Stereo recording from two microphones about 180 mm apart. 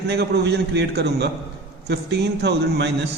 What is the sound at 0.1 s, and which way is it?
A man's voice, 65° right (ahead or behind).